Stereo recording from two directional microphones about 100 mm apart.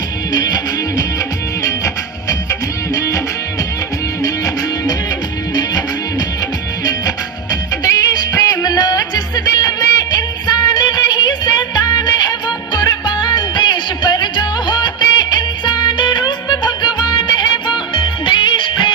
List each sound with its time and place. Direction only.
0.3 s music: 45° left (ahead or behind)
4.2 s music: 40° left (ahead or behind)
7.9 s music: 40° left (ahead or behind)